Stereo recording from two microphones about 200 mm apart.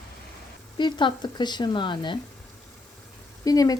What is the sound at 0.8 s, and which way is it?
Speech, 25° left (ahead or behind).